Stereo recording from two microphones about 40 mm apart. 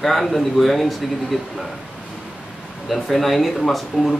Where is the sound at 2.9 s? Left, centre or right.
Centre.